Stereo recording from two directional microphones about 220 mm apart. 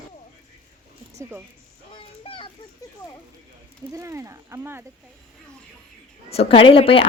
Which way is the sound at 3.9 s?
15° right (ahead or behind).